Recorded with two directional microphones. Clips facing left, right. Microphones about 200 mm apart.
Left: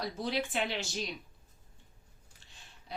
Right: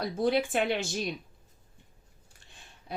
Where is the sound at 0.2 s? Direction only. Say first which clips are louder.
Right 8 dB; 50° right (ahead or behind).